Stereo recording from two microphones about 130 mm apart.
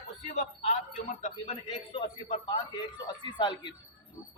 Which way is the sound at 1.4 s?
50° left (ahead or behind).